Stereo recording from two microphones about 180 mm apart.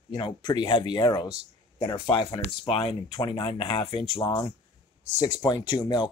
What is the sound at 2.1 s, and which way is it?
Speech, 30° left (ahead or behind).